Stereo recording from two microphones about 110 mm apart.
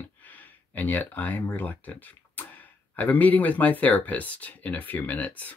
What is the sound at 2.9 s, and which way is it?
Speech, 15° left (ahead or behind).